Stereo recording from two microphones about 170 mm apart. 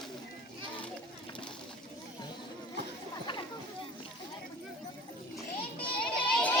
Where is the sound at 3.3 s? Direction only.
30° left (ahead or behind).